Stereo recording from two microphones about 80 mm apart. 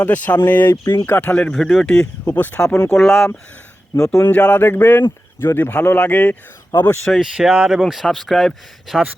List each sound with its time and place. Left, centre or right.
0.0 s a man's voice: left
1.4 s speech: centre
2.2 s a man's voice: left
2.9 s speech: centre
4.2 s a man's voice: centre
7.2 s speech: centre